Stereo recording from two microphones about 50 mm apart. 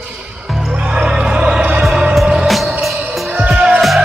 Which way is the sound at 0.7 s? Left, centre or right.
Centre.